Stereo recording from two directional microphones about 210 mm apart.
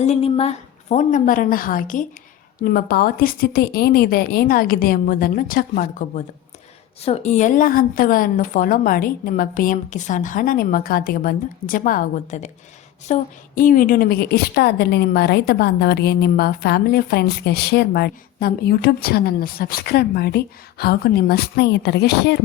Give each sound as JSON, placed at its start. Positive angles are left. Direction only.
{"t": 0.0, "sound": "a woman's voice", "side_deg": 30}